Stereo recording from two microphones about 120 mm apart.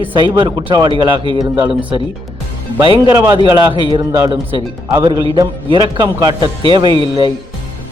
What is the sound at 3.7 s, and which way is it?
Speech, 45° right (ahead or behind).